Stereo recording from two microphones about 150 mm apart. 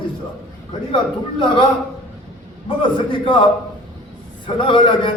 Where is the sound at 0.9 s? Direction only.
35° left (ahead or behind).